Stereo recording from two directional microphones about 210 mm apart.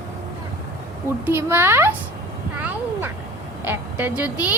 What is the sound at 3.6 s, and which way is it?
Speech, 10° right (ahead or behind).